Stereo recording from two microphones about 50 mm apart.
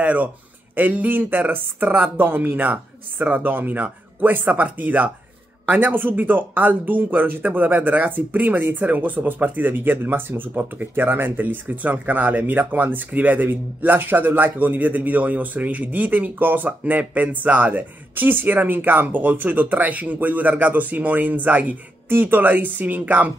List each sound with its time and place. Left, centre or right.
0.0 s speech: right
22.1 s speech: right